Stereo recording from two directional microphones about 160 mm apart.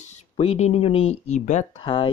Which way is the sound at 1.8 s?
35° left (ahead or behind).